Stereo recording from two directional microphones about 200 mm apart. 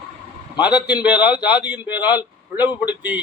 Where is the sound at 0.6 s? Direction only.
5° right (ahead or behind).